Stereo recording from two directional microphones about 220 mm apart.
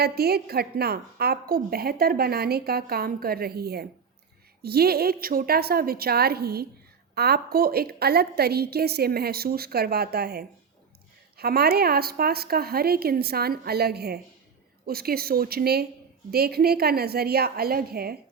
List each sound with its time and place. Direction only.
0.0 s a woman's voice: 45° right (ahead or behind)